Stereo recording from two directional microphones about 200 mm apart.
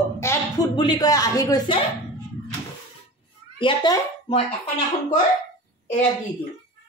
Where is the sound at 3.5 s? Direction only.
20° left (ahead or behind).